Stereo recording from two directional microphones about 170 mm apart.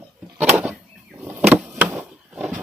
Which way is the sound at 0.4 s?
10° right (ahead or behind).